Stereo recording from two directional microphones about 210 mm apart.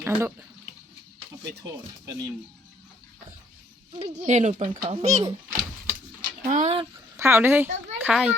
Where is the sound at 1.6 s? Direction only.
15° right (ahead or behind).